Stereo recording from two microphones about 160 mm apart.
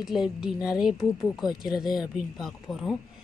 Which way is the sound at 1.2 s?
25° left (ahead or behind).